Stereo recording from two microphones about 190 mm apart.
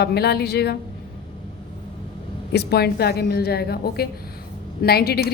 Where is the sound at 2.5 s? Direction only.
55° left (ahead or behind).